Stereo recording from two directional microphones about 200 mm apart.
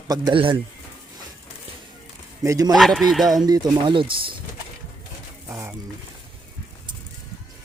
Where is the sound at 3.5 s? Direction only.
20° right (ahead or behind).